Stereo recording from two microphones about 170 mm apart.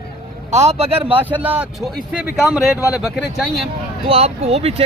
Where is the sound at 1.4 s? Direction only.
10° right (ahead or behind).